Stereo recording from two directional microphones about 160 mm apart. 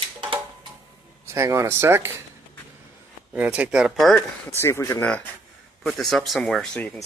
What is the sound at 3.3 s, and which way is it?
Speech, 10° right (ahead or behind).